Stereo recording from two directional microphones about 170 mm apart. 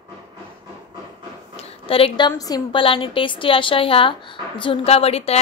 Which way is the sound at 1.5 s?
35° left (ahead or behind).